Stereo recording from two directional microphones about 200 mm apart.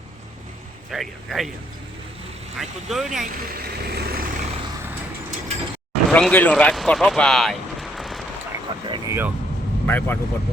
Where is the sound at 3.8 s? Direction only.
50° right (ahead or behind).